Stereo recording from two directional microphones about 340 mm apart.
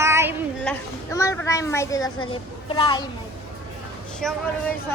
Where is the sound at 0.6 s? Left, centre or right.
Centre.